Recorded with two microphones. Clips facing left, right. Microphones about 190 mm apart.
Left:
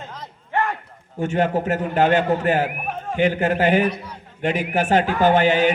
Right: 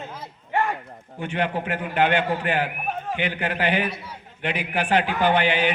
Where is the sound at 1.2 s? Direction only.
45° left (ahead or behind).